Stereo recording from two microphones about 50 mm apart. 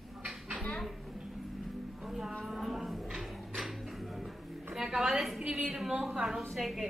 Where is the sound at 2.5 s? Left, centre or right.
Centre.